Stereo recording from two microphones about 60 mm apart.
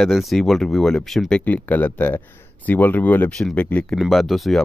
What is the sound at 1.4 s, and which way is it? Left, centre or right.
Speech, left.